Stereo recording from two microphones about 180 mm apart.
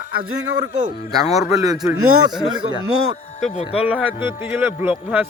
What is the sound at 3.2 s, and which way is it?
Speech, 45° left (ahead or behind).